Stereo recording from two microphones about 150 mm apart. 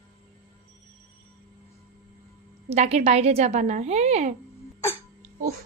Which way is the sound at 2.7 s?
45° right (ahead or behind).